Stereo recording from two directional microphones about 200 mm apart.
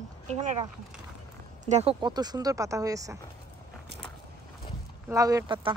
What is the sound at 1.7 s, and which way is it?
Speech, 25° right (ahead or behind).